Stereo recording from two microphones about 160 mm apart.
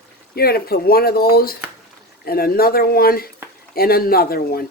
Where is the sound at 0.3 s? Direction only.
75° left (ahead or behind).